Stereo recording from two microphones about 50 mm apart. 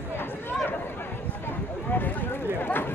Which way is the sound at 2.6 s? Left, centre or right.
Left.